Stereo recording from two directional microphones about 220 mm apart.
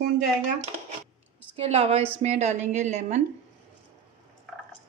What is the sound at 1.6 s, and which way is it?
A woman's voice, 30° right (ahead or behind).